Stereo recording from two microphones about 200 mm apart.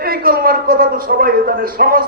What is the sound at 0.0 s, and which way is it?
Music, 45° right (ahead or behind).